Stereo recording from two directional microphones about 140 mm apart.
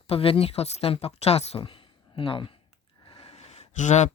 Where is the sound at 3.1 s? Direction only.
45° left (ahead or behind); by 4.1 s 60° left (ahead or behind).